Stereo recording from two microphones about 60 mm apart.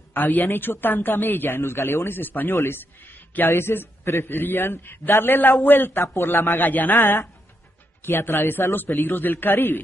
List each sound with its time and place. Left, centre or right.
0.1 s a man's voice: left